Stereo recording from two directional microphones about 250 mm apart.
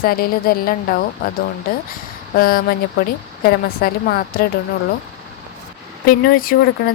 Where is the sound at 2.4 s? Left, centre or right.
Left.